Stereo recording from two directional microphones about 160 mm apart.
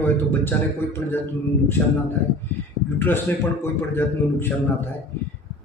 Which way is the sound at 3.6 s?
15° left (ahead or behind).